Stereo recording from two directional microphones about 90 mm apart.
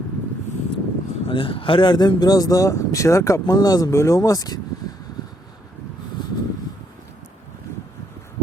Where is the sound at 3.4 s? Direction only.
45° left (ahead or behind).